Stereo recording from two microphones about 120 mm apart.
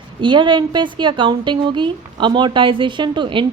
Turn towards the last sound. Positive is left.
turn(degrees=-40)  # may be behind; listen again after turning